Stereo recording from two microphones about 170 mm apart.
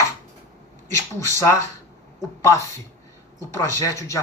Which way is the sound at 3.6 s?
20° left (ahead or behind).